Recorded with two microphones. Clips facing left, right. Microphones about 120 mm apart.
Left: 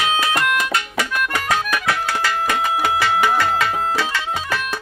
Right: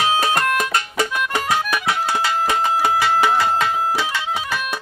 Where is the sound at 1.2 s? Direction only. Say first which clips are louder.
Left 1 dB; 15° right (ahead or behind).